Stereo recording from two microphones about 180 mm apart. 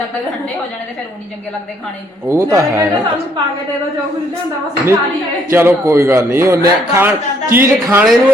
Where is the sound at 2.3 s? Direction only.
15° right (ahead or behind).